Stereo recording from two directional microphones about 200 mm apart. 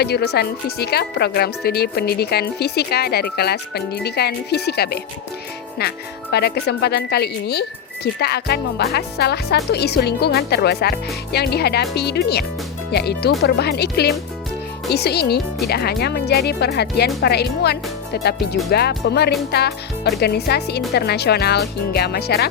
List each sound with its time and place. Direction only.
0.0 s speech: 55° left (ahead or behind)